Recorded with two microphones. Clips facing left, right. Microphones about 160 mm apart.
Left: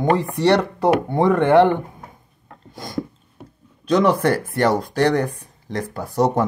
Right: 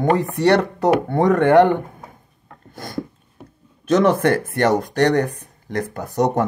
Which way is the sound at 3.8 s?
50° right (ahead or behind).